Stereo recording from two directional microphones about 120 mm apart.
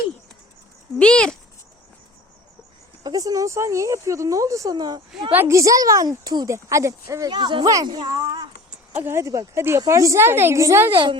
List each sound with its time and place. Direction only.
0.9 s speech: 5° left (ahead or behind)
3.0 s a woman's voice: 30° right (ahead or behind)
5.3 s a woman's voice: 20° right (ahead or behind); by 8.4 s 35° right (ahead or behind)
9.0 s a woman's voice: 20° right (ahead or behind)
10.9 s a child's voice: 45° right (ahead or behind)